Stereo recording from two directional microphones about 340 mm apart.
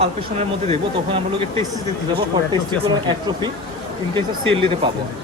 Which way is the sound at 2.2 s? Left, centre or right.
Centre.